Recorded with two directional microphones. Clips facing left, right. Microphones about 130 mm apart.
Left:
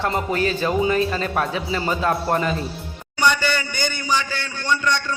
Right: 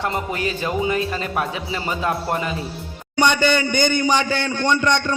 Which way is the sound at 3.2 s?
20° right (ahead or behind).